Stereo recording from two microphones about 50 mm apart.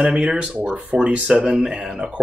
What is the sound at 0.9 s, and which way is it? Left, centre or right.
Speech, right.